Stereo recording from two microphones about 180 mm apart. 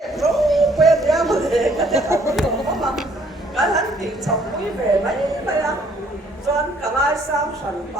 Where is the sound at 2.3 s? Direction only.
Centre (ahead or behind).